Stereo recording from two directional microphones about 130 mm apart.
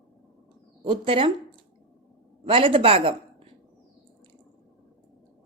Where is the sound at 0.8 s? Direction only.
45° right (ahead or behind).